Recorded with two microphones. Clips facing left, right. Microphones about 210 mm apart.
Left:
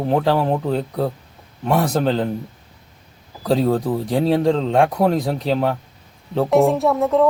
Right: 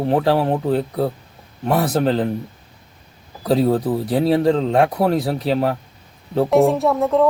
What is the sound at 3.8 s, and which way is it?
Speech, 5° right (ahead or behind).